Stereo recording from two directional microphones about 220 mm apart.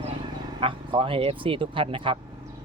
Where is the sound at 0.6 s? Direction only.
25° right (ahead or behind).